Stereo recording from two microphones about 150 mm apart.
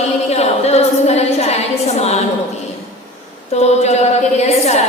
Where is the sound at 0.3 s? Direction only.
45° left (ahead or behind).